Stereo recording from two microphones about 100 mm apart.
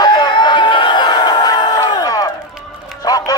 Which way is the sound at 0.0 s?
45° left (ahead or behind).